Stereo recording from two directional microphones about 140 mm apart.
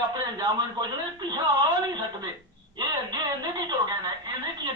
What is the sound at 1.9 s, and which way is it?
A man's voice, 30° right (ahead or behind).